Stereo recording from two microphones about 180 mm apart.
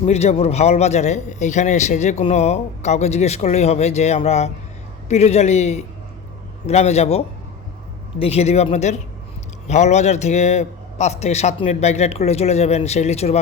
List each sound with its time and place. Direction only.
0.0 s a man's voice: 35° left (ahead or behind)